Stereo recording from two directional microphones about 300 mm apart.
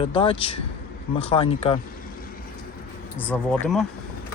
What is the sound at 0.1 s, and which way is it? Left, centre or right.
Speech, centre.